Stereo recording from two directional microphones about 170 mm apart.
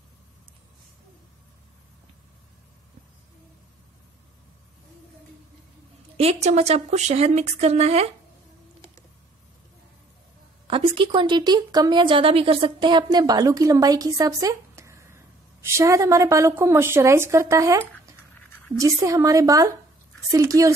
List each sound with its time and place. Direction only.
6.1 s a woman's voice: 40° right (ahead or behind)
10.7 s a woman's voice: 30° right (ahead or behind)